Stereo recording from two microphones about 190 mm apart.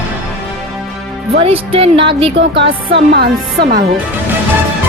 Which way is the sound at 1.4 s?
30° right (ahead or behind).